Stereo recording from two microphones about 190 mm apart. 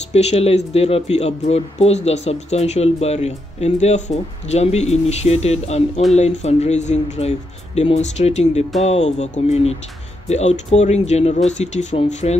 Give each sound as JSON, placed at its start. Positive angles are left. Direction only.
{"t": 0.1, "sound": "speech", "side_deg": 35}